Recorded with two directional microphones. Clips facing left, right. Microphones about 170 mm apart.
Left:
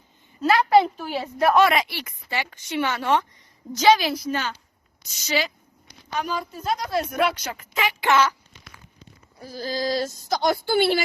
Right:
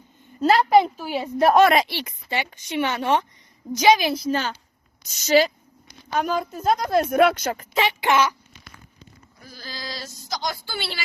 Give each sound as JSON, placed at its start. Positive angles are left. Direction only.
{"t": 0.7, "sound": "a woman's voice", "side_deg": -10}
{"t": 1.4, "sound": "a woman's voice", "side_deg": -30}
{"t": 5.0, "sound": "speech", "side_deg": -45}
{"t": 8.0, "sound": "speech", "side_deg": -15}
{"t": 9.4, "sound": "a woman's voice", "side_deg": 40}